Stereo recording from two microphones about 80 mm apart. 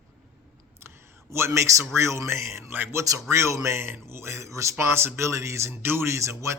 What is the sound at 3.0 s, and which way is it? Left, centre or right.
Speech, right.